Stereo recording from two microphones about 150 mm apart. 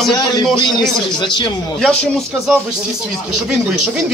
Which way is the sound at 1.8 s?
5° left (ahead or behind).